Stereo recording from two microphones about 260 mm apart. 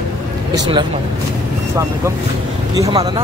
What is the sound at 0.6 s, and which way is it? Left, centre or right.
Speech, centre.